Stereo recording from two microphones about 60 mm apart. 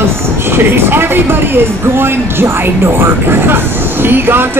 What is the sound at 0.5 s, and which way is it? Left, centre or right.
Speech, right.